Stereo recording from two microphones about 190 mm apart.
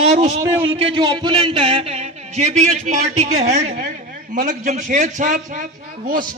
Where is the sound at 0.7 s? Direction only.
25° right (ahead or behind).